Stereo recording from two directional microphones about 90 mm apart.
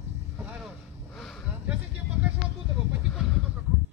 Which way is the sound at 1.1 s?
5° left (ahead or behind).